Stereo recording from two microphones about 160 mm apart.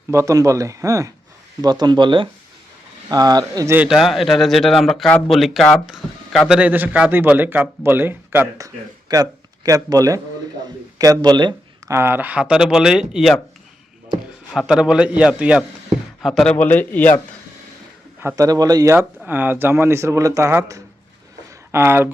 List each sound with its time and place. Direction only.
0.1 s speech: 20° right (ahead or behind)
3.8 s speech: centre (ahead or behind); by 11.9 s 25° right (ahead or behind)
11.9 s speech: 15° right (ahead or behind)
14.7 s a man's voice: 5° right (ahead or behind); by 17.2 s 10° left (ahead or behind)
18.2 s speech: 15° right (ahead or behind)
18.9 s speech: 10° right (ahead or behind)